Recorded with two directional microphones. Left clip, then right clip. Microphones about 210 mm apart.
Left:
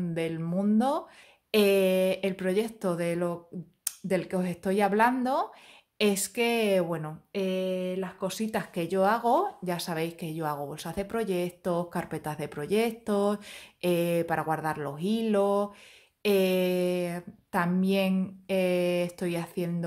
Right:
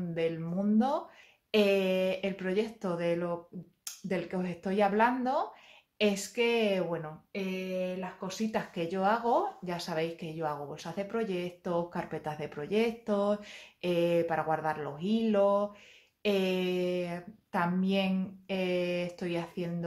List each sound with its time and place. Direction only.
0.1 s speech: 45° left (ahead or behind)